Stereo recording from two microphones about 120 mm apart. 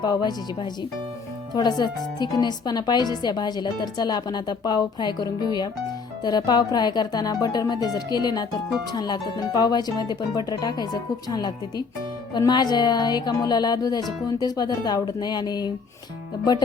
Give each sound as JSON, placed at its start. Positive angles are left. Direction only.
{"t": 0.0, "sound": "a woman's voice", "side_deg": 35}